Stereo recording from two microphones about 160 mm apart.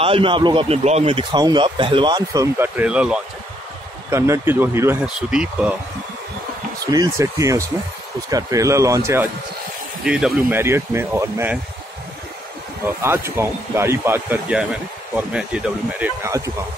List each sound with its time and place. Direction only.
0.0 s a man's voice: 35° right (ahead or behind); by 5.8 s 5° right (ahead or behind)
6.9 s a man's voice: 20° right (ahead or behind)
10.0 s speech: 5° right (ahead or behind)
10.6 s speech: 15° right (ahead or behind)
12.8 s speech: 15° right (ahead or behind)